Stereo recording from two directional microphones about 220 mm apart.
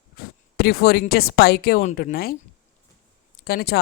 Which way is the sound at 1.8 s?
30° left (ahead or behind).